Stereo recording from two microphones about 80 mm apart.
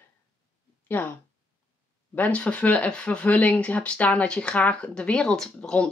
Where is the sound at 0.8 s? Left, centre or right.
Left.